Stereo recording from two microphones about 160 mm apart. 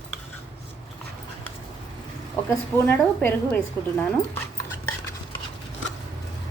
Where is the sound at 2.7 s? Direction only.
10° left (ahead or behind).